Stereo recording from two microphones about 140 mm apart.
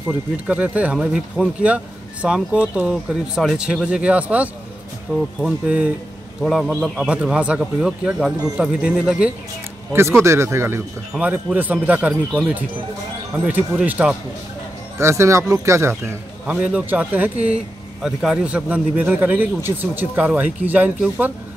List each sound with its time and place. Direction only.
0.5 s a man's voice: 10° right (ahead or behind)
9.9 s a man's voice: 20° right (ahead or behind)
13.5 s a man's voice: 10° right (ahead or behind)
15.0 s a man's voice: 20° right (ahead or behind)